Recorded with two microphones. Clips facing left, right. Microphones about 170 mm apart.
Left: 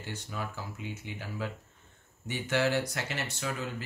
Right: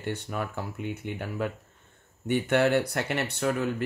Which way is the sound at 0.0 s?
60° right (ahead or behind).